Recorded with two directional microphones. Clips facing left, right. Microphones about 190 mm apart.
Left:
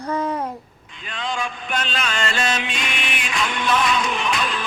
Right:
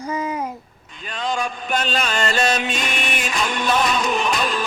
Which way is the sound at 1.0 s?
40° right (ahead or behind).